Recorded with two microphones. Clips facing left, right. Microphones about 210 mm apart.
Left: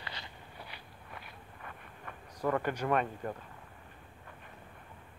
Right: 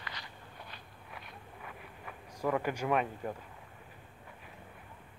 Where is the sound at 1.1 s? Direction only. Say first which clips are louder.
Right 1 dB; 5° right (ahead or behind).